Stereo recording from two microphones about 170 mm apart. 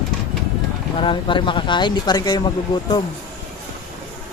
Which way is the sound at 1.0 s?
30° left (ahead or behind).